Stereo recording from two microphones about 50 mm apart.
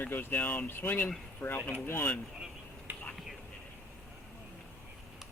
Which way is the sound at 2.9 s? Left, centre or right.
Right.